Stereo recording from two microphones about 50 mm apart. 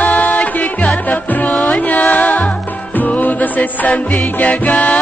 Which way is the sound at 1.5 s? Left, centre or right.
Left.